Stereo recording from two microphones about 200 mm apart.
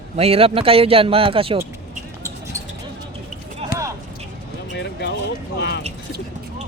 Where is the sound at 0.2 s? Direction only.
30° right (ahead or behind).